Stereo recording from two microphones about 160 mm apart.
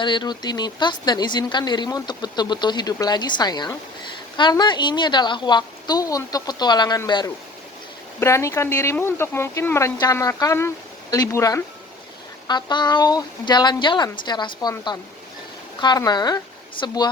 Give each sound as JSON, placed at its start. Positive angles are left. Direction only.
{"t": 0.0, "sound": "a woman's voice", "side_deg": 30}